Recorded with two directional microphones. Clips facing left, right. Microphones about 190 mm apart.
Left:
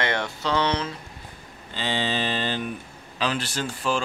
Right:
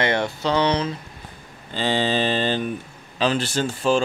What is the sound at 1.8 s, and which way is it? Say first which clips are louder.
Mantra: right 5 dB; 40° right (ahead or behind).